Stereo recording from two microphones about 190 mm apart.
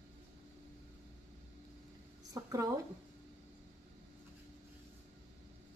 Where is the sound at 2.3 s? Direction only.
15° right (ahead or behind).